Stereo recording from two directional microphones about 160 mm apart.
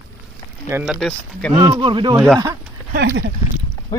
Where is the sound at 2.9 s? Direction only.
90° right.